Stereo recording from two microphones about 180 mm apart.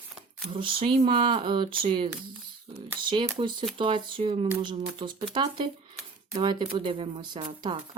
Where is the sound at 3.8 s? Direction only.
30° right (ahead or behind).